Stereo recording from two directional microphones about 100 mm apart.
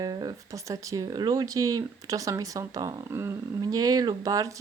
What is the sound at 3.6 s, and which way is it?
Speech, 40° right (ahead or behind).